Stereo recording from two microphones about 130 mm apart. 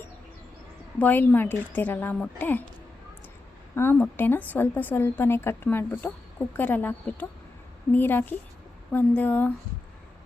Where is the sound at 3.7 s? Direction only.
15° left (ahead or behind).